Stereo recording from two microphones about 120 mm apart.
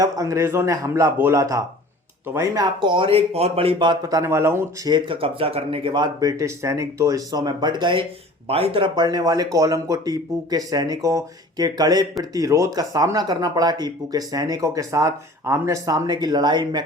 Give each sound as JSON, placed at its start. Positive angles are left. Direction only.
{"t": 0.0, "sound": "speech", "side_deg": -30}
{"t": 2.8, "sound": "speech", "side_deg": -45}
{"t": 4.9, "sound": "speech", "side_deg": -40}
{"t": 8.4, "sound": "speech", "side_deg": -55}